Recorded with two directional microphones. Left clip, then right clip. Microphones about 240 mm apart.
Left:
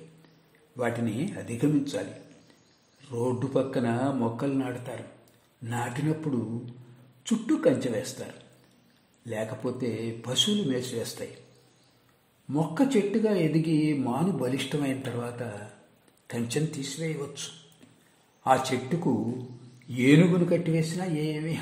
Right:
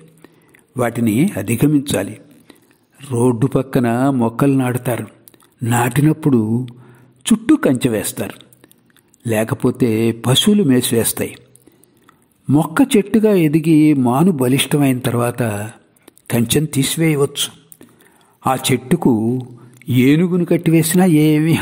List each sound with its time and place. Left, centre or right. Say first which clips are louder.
0.7 s a man's voice: right 12 dB; right
12.4 s a man's voice: right 12 dB; right